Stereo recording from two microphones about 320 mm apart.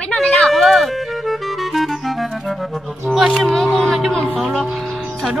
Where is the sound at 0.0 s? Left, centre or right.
Centre.